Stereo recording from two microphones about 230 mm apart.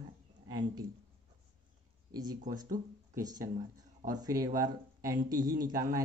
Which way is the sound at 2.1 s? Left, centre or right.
Centre.